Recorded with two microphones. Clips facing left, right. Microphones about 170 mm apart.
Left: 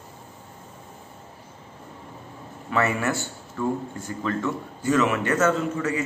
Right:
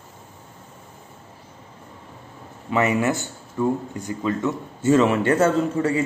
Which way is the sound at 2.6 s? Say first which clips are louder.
Right 4 dB; 20° right (ahead or behind).